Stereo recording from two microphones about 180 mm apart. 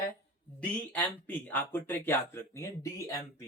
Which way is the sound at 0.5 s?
10° left (ahead or behind).